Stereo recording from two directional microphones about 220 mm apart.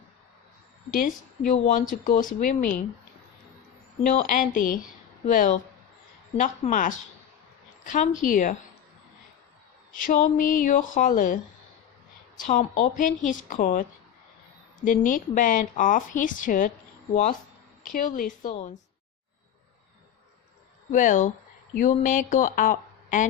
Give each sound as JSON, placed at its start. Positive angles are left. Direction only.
{"t": 1.5, "sound": "a woman's voice", "side_deg": 35}
{"t": 4.0, "sound": "a woman's voice", "side_deg": 35}
{"t": 9.9, "sound": "a woman's voice", "side_deg": 35}
{"t": 12.4, "sound": "a woman's voice", "side_deg": 35}
{"t": 14.8, "sound": "a woman's voice", "side_deg": 35}
{"t": 17.8, "sound": "a woman's voice", "side_deg": 40}
{"t": 20.9, "sound": "a woman's voice", "side_deg": 35}